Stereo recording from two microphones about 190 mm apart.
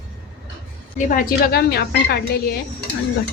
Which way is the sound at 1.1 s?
50° left (ahead or behind).